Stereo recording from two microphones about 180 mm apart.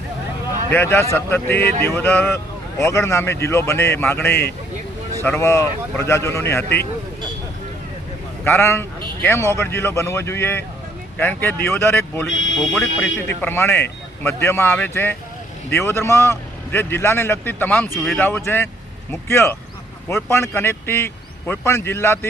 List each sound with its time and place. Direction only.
0.7 s speech: 15° left (ahead or behind)
8.4 s speech: 15° left (ahead or behind)
12.2 s speech: centre (ahead or behind)